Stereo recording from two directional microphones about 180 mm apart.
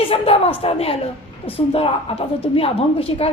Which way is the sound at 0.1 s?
35° left (ahead or behind).